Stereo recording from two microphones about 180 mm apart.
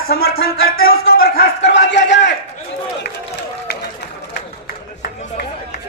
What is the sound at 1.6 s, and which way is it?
Speech, 80° left.